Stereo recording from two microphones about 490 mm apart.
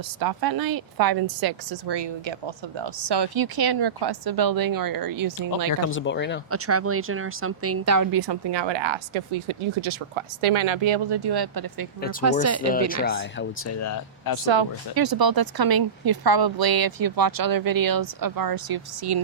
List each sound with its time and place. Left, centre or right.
0.2 s a woman's voice: right
5.8 s speech: left
6.5 s a woman's voice: right
12.2 s speech: right
13.1 s speech: left
14.4 s speech: right
14.9 s a woman's voice: right